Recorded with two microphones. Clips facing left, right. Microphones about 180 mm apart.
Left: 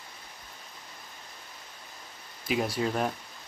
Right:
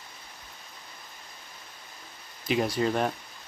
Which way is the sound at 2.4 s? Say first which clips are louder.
Right 3 dB; 5° left (ahead or behind).